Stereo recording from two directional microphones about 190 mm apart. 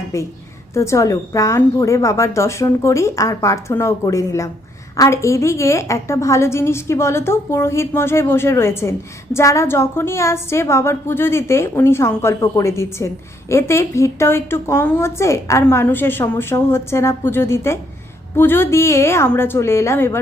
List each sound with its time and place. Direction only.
0.1 s a woman's voice: 15° left (ahead or behind)